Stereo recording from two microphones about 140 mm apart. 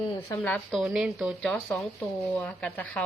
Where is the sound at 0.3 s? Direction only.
10° left (ahead or behind).